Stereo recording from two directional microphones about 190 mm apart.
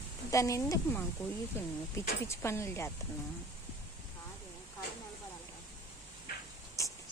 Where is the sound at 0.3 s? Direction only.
15° left (ahead or behind).